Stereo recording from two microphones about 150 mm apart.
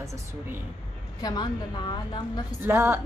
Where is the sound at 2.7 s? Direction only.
15° right (ahead or behind).